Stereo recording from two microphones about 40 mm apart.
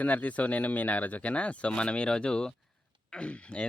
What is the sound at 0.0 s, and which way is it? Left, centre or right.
Speech, left.